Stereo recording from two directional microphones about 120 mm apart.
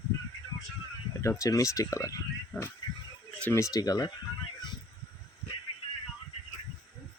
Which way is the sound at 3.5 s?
25° left (ahead or behind).